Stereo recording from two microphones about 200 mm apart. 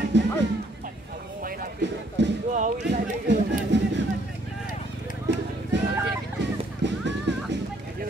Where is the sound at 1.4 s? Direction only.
60° right (ahead or behind).